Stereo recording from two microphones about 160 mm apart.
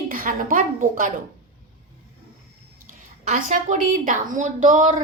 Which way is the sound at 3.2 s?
55° right (ahead or behind).